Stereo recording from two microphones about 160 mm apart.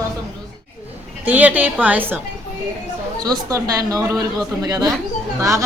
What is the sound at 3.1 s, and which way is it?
Speech, 20° right (ahead or behind).